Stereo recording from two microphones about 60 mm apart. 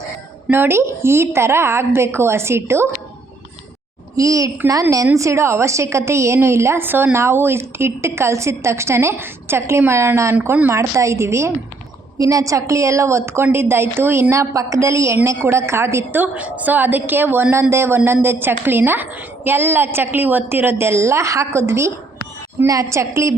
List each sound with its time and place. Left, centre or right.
0.5 s a woman's voice: right
4.2 s a child's voice: right
6.8 s a woman's voice: right
12.2 s a woman's voice: right
14.5 s a woman's voice: right
16.1 s a woman's voice: right
22.6 s a woman's voice: right